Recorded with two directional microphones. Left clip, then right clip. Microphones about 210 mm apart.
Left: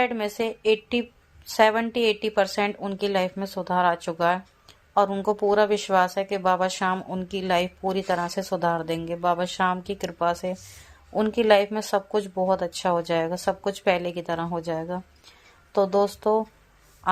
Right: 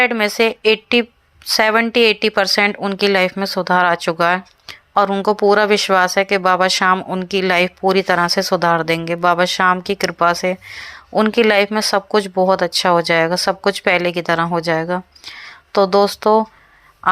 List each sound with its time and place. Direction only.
0.0 s speech: 20° right (ahead or behind)